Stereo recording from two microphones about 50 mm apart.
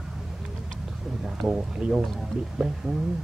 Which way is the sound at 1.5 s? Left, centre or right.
Centre.